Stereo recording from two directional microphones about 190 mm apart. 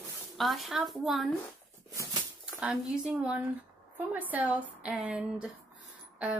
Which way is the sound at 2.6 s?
5° right (ahead or behind).